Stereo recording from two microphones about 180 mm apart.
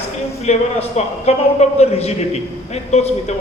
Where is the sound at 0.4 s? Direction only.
40° left (ahead or behind).